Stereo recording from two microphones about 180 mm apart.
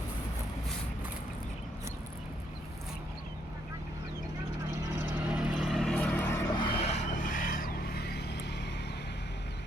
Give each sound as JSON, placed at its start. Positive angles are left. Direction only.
{"t": 5.3, "sound": "vehicle", "side_deg": 0}
{"t": 6.6, "sound": "vehicle", "side_deg": 30}